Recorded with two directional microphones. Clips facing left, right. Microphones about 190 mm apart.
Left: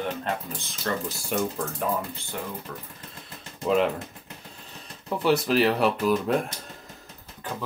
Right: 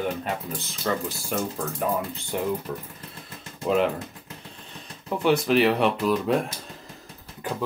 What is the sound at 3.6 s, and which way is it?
Speech, centre (ahead or behind).